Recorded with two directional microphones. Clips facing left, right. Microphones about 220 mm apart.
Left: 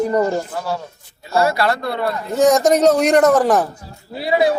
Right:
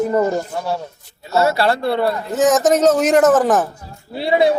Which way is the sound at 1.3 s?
25° right (ahead or behind).